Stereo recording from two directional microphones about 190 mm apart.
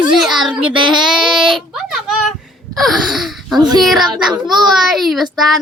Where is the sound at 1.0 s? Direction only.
Centre (ahead or behind).